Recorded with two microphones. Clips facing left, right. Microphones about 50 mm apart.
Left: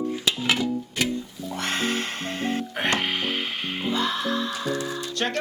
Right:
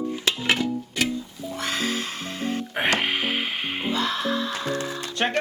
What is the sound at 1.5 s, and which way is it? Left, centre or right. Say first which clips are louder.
Music: left 1 dB; left.